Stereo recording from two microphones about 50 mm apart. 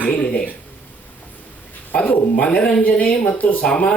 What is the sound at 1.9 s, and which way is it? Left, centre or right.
Speech, left.